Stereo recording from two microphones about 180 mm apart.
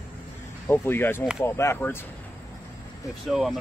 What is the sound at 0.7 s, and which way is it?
Speech, 10° left (ahead or behind).